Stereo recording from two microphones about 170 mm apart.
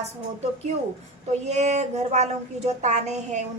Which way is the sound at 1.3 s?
40° right (ahead or behind).